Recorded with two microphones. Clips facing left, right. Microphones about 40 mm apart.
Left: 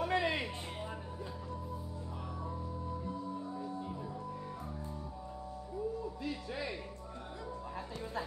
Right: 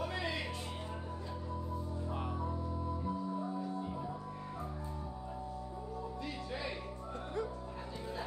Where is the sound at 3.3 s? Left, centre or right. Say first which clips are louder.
Right 2 dB; centre.